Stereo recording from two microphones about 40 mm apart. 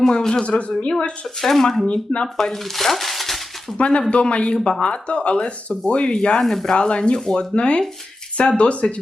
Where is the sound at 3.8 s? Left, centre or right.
Left.